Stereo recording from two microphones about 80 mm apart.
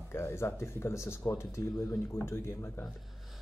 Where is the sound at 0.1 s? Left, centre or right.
Left.